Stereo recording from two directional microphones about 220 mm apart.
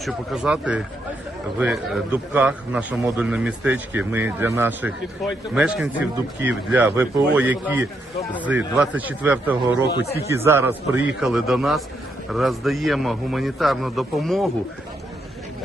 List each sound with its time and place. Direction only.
0.0 s a man's voice: 5° right (ahead or behind)
9.9 s speech: 45° left (ahead or behind)
10.3 s a man's voice: 10° right (ahead or behind)